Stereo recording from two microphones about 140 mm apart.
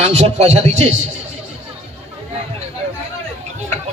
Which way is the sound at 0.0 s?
50° right (ahead or behind).